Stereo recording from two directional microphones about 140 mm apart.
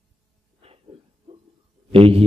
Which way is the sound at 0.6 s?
45° right (ahead or behind).